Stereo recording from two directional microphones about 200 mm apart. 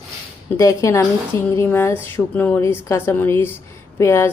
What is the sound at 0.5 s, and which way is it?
Speech, 15° left (ahead or behind).